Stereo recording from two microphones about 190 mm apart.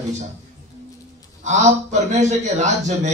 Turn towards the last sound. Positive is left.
turn(degrees=-40)  # may be behind; listen again after turning